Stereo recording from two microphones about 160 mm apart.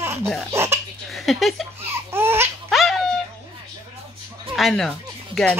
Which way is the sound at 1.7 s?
15° right (ahead or behind).